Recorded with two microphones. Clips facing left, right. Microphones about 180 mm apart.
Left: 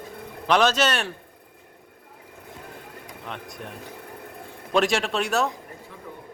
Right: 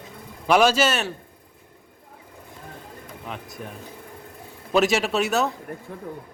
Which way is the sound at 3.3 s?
Centre (ahead or behind).